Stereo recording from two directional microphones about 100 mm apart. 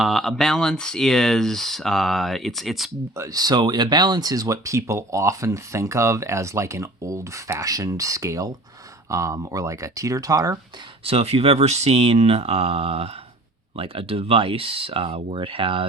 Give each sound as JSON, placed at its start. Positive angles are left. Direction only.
{"t": 0.0, "sound": "speech", "side_deg": 0}
{"t": 3.2, "sound": "speech", "side_deg": -40}
{"t": 11.0, "sound": "speech", "side_deg": -75}
{"t": 13.7, "sound": "speech", "side_deg": -65}